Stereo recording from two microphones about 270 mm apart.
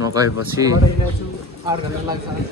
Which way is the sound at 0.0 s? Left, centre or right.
Centre.